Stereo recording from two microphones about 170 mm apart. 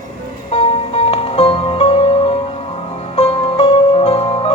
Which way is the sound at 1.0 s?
35° left (ahead or behind).